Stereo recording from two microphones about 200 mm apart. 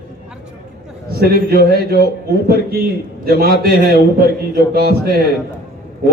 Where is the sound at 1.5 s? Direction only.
50° right (ahead or behind).